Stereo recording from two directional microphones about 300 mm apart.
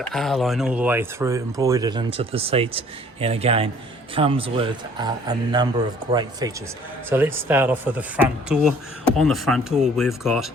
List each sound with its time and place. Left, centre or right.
0.1 s speech: centre